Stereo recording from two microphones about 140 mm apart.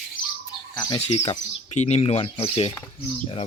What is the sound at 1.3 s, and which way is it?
Speech, 50° left (ahead or behind).